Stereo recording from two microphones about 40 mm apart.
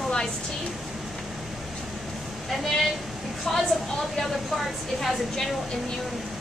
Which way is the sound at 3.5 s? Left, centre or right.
Centre.